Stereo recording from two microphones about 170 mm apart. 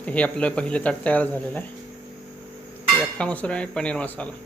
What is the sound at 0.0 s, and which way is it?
Speech, 5° left (ahead or behind).